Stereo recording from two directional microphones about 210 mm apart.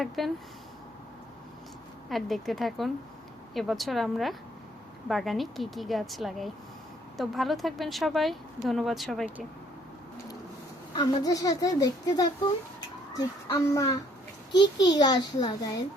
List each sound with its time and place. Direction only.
0.2 s a woman's voice: centre (ahead or behind)
2.0 s a woman's voice: centre (ahead or behind)
10.9 s a child's voice: 20° left (ahead or behind)